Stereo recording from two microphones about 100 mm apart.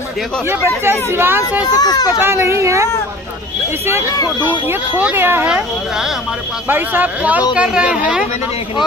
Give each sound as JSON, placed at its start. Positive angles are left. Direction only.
{"t": 0.5, "sound": "speech", "side_deg": -25}
{"t": 1.6, "sound": "a child's voice", "side_deg": 40}
{"t": 2.2, "sound": "speech", "side_deg": -25}
{"t": 4.6, "sound": "speech", "side_deg": -20}
{"t": 6.7, "sound": "a woman's voice", "side_deg": -20}